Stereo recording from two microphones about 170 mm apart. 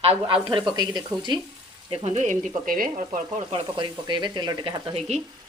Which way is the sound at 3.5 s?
30° right (ahead or behind).